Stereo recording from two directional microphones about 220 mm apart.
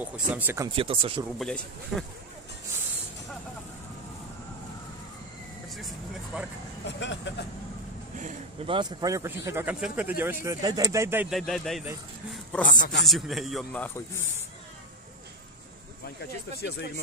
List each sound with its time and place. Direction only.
0.0 s speech: 5° right (ahead or behind)
0.7 s speech: 25° right (ahead or behind)
1.4 s a man's voice: centre (ahead or behind)
5.8 s a man's voice: centre (ahead or behind)
6.9 s speech: 55° left (ahead or behind)
8.2 s speech: 35° right (ahead or behind)
8.7 s speech: 15° right (ahead or behind); by 11.9 s centre (ahead or behind)
12.6 s a man's voice: 40° left (ahead or behind)
13.0 s a man's voice: centre (ahead or behind)
13.8 s a man's voice: 10° left (ahead or behind)
16.2 s speech: 50° left (ahead or behind)